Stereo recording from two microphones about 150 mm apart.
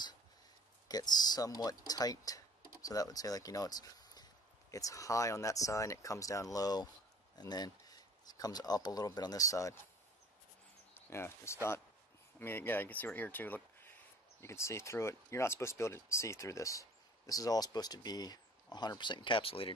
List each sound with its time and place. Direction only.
0.8 s speech: 25° left (ahead or behind)
11.1 s speech: 15° left (ahead or behind); by 19.7 s 40° left (ahead or behind)